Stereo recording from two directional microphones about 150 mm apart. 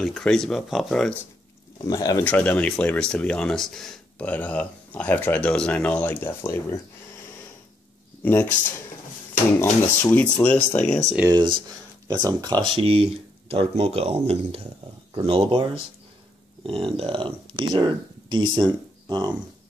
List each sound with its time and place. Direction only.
0.0 s speech: centre (ahead or behind)
1.8 s speech: 25° left (ahead or behind)
2.2 s speech: 10° left (ahead or behind)
8.2 s speech: 10° left (ahead or behind)
11.2 s speech: 30° right (ahead or behind)